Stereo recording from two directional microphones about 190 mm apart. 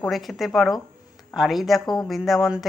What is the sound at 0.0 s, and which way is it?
Speech, centre (ahead or behind).